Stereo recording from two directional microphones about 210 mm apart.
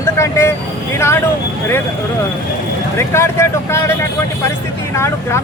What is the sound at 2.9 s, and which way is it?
Speech, 10° left (ahead or behind).